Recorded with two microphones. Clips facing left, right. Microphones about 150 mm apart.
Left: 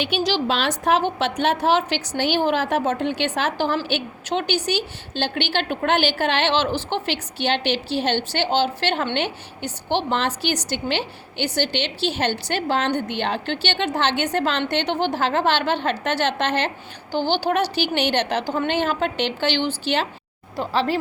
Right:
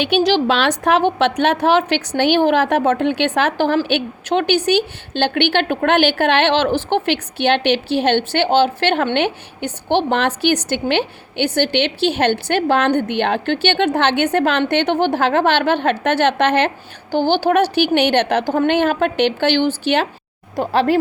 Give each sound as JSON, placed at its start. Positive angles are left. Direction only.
{"t": 0.0, "sound": "a woman's voice", "side_deg": -65}